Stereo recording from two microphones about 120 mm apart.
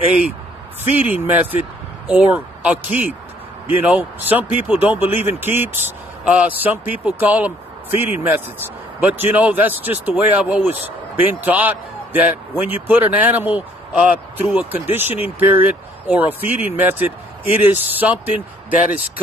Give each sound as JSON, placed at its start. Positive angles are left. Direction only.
{"t": 0.9, "sound": "speech", "side_deg": -15}